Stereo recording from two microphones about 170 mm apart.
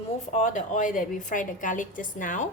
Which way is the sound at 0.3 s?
45° left (ahead or behind).